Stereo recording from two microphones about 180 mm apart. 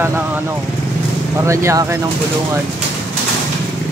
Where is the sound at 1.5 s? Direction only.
15° right (ahead or behind).